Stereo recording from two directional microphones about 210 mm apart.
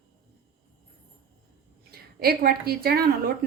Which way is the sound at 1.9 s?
45° right (ahead or behind).